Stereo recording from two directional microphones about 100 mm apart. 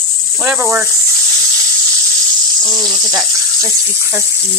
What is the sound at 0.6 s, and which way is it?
Speech, 20° right (ahead or behind).